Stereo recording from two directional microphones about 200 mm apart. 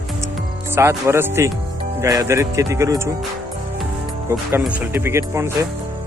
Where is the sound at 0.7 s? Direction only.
10° right (ahead or behind).